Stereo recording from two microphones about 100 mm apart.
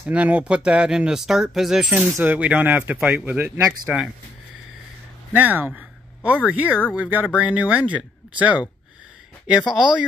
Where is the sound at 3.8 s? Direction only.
10° right (ahead or behind).